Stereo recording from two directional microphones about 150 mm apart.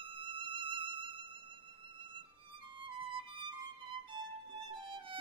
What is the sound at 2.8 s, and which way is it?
Music, 35° right (ahead or behind).